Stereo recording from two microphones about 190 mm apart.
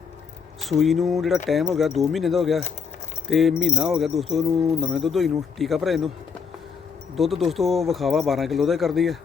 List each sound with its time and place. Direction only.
0.6 s speech: centre (ahead or behind)
7.2 s speech: centre (ahead or behind)